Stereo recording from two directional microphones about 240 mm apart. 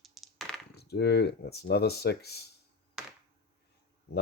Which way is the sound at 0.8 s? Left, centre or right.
Left.